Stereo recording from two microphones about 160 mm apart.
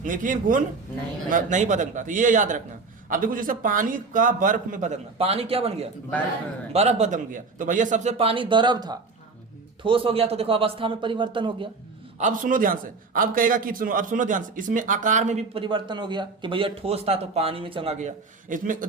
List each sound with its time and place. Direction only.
0.0 s a man's voice: 55° right (ahead or behind); by 5.7 s 40° right (ahead or behind)
6.7 s a man's voice: 45° right (ahead or behind)
12.2 s a man's voice: 55° right (ahead or behind)